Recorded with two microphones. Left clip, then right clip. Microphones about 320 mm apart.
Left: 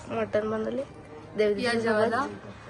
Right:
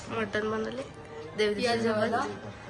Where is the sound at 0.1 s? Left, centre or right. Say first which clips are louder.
Left 3 dB; centre.